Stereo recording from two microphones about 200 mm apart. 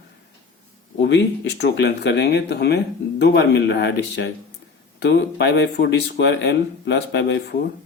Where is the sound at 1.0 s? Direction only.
60° left (ahead or behind).